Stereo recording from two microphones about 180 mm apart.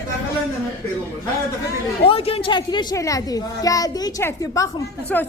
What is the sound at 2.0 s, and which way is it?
A child's voice, 30° left (ahead or behind).